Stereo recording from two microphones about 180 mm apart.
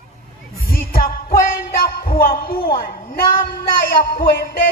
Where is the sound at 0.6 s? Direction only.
55° left (ahead or behind).